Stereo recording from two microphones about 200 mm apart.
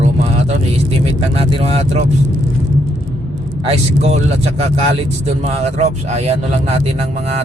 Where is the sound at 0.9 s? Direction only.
30° right (ahead or behind).